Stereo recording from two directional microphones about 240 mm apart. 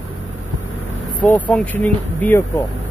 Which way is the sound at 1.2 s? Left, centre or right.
Centre.